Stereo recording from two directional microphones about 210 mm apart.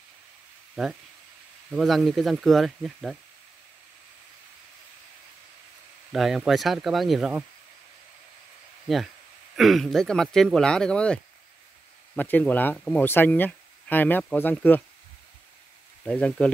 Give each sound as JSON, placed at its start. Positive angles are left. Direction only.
{"t": 0.8, "sound": "speech", "side_deg": 0}
{"t": 6.1, "sound": "speech", "side_deg": 0}
{"t": 8.8, "sound": "speech", "side_deg": 0}
{"t": 12.2, "sound": "speech", "side_deg": 10}
{"t": 16.0, "sound": "speech", "side_deg": 5}